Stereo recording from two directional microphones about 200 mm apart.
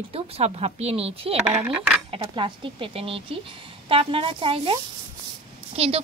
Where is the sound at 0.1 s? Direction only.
30° right (ahead or behind).